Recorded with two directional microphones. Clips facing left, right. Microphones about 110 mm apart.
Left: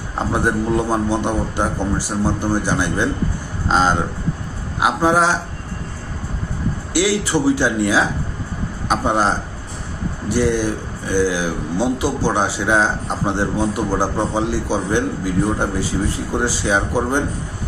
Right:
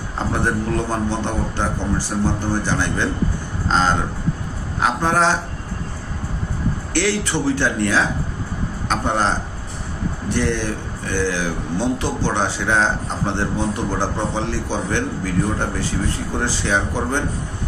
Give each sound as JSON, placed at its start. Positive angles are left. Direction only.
{"t": 0.3, "sound": "a man's voice", "side_deg": 15}
{"t": 6.9, "sound": "a man's voice", "side_deg": 10}